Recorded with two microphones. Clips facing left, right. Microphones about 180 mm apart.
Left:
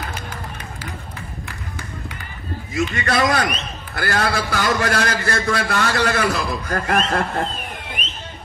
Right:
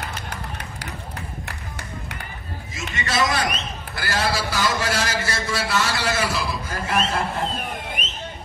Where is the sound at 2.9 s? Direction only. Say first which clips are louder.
Left 2 dB; 55° left (ahead or behind).